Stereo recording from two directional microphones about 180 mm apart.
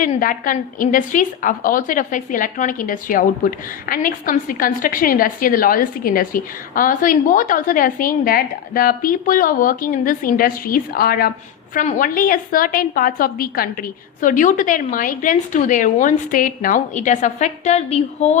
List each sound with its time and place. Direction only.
0.0 s a woman's voice: 50° left (ahead or behind)